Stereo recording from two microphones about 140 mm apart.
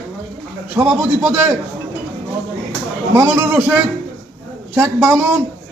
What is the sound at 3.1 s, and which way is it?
Speech, 20° right (ahead or behind).